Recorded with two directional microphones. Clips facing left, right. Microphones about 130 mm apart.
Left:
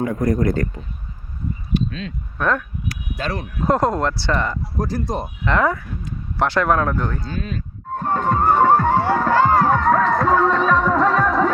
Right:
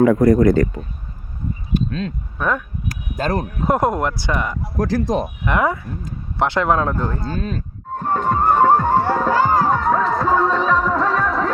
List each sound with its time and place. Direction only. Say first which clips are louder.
0.0 s speech: right 7 dB; 90° right
1.7 s speech: right 2 dB; 40° right (ahead or behind)
2.4 s speech: left 1 dB; 10° right (ahead or behind)
2.9 s speech: right 6 dB; 45° right (ahead or behind)
3.7 s speech: even; 20° right (ahead or behind)
4.8 s speech: right 5 dB; 90° right
5.5 s speech: left 1 dB; 20° right (ahead or behind)
7.2 s speech: right 3 dB; 40° right (ahead or behind)
7.9 s music: even; 10° right (ahead or behind)